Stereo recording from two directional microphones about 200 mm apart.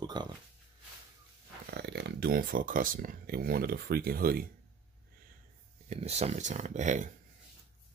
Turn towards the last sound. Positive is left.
turn(degrees=-35)  # may be behind; listen again after turning